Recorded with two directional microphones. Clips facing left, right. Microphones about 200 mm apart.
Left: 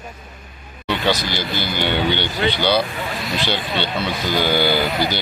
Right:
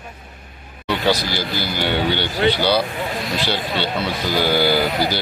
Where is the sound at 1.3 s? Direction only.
5° right (ahead or behind).